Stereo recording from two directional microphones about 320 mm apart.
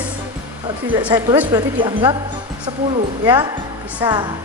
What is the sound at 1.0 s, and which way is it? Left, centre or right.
A woman's voice, centre.